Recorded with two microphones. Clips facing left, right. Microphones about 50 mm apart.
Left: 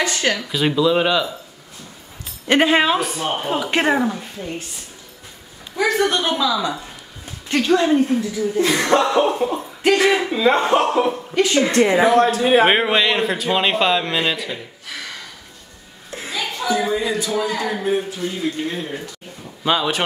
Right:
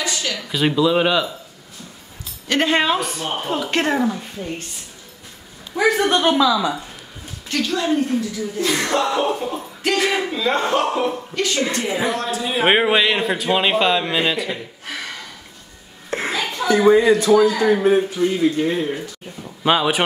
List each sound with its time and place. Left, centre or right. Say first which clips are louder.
0.0 s a sound: left 5 dB; left
0.4 s speech: even; centre
2.6 s speech: even; centre
4.1 s speech: right 1 dB; centre
5.8 s a woman's voice: right 1 dB; centre
7.4 s a woman's voice: left 4 dB; left
11.7 s a man's voice: left 8 dB; left
12.6 s speech: even; centre
16.1 s a sound: right 4 dB; right
16.6 s speech: right 8 dB; right
17.2 s speech: right 8 dB; right
17.6 s a woman's voice: right 6 dB; centre